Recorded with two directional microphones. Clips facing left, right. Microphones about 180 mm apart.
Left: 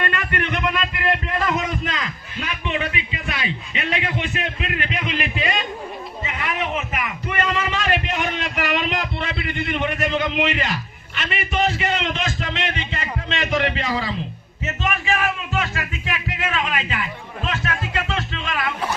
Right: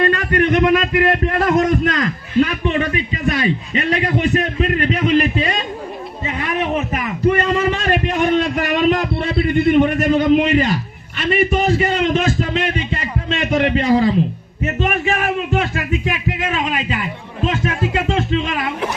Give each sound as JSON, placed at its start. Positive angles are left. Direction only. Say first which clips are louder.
{"t": 0.0, "sound": "a man's voice", "louder": "right 9 dB", "side_deg": -40}
{"t": 6.7, "sound": "a man's voice", "louder": "right 6 dB", "side_deg": -40}